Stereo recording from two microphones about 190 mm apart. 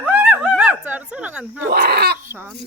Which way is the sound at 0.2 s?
10° right (ahead or behind).